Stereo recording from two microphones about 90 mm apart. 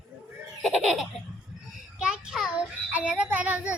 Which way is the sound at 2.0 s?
5° right (ahead or behind).